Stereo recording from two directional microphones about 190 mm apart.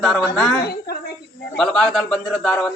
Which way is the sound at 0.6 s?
55° left (ahead or behind).